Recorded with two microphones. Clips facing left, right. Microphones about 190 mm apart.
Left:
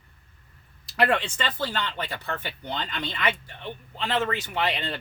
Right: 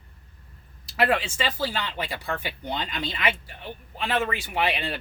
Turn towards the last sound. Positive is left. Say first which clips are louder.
# right 1 dB
turn(degrees=-10)  # may be behind; listen again after turning